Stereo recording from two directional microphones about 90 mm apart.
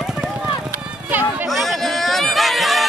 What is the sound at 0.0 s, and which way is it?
Run, 5° right (ahead or behind).